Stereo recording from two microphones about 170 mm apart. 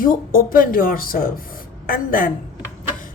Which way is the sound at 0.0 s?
55° left (ahead or behind).